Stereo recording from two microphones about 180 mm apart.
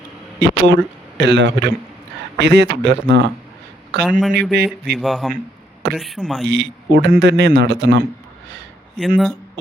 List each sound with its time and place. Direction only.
0.4 s a man's voice: 70° right (ahead or behind)
4.2 s speech: centre (ahead or behind)
6.5 s a man's voice: 75° right (ahead or behind)
9.0 s speech: centre (ahead or behind)